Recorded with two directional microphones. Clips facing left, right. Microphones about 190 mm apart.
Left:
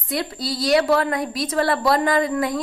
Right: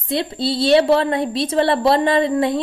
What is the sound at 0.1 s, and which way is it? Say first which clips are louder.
A woman's voice: right 5 dB; 25° right (ahead or behind).